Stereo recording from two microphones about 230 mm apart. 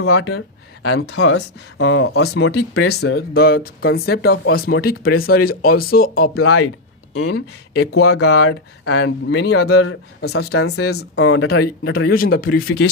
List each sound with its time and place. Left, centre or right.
0.1 s speech: left
8.1 s speech: left
9.3 s speech: left
9.6 s speech: left
10.3 s speech: left
11.2 s speech: left
11.4 s speech: left